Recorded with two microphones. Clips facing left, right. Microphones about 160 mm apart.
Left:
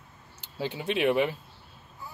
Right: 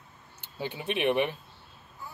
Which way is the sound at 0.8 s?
20° right (ahead or behind).